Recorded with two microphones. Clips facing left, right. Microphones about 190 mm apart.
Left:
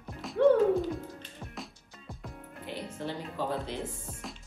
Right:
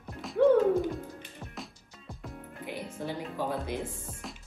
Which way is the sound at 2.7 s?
10° right (ahead or behind).